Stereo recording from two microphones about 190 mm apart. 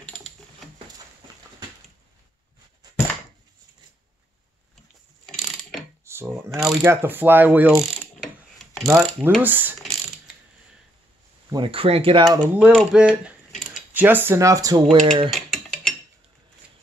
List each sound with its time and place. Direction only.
5.2 s mechanisms: centre (ahead or behind)
6.0 s speech: 15° right (ahead or behind)
6.6 s speech: 5° right (ahead or behind)
6.9 s mechanisms: 10° right (ahead or behind)
9.8 s mechanisms: centre (ahead or behind)
11.5 s speech: 25° right (ahead or behind)
12.4 s speech: centre (ahead or behind); by 14.8 s 15° right (ahead or behind)
14.9 s speech: 30° right (ahead or behind)
15.3 s mechanisms: centre (ahead or behind)